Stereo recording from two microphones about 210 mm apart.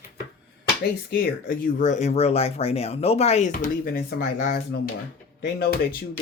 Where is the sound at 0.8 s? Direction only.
45° left (ahead or behind).